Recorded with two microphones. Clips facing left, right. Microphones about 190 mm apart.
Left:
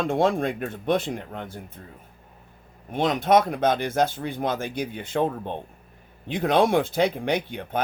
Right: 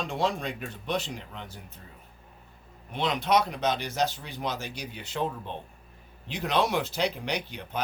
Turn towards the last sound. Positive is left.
turn(degrees=55)  # may be behind; listen again after turning